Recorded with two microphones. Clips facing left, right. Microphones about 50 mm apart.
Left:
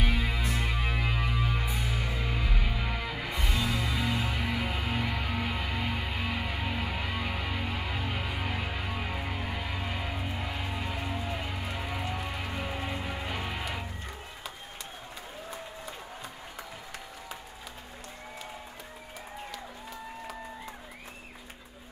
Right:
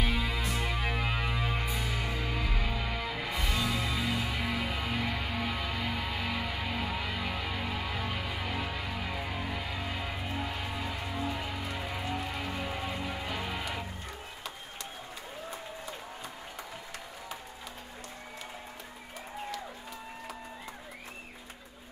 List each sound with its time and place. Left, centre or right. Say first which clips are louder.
0.0 s music: left 1 dB; centre
1.8 s music: even; centre; by 10.0 s left
10.3 s music: even; centre
10.9 s music: left 2 dB; left
11.2 s music: even; centre